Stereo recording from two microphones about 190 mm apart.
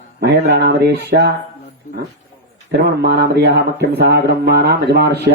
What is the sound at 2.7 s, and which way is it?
Speech, 55° right (ahead or behind).